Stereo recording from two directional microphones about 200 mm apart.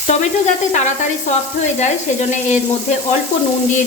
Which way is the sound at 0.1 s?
35° left (ahead or behind).